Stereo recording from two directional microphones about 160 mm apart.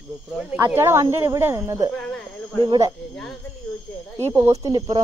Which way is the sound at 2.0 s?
5° left (ahead or behind).